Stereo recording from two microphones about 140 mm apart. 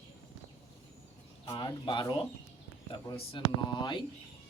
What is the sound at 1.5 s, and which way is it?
Speech, 35° left (ahead or behind).